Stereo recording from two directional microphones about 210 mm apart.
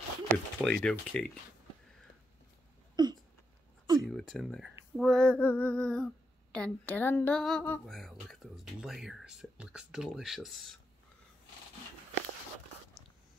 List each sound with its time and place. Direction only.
0.3 s speech: 5° left (ahead or behind)
3.0 s a sound: 20° right (ahead or behind)
4.1 s speech: centre (ahead or behind)